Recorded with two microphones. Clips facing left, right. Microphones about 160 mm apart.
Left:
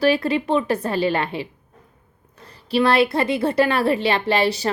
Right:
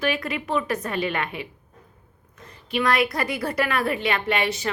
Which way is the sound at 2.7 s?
30° left (ahead or behind).